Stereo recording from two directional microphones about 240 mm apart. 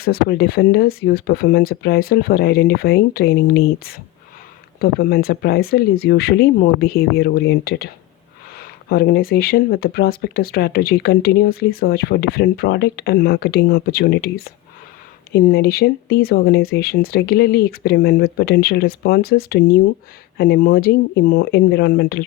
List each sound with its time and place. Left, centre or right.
0.0 s speech: left